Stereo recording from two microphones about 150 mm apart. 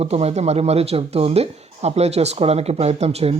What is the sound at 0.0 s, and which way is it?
Speech, 45° right (ahead or behind).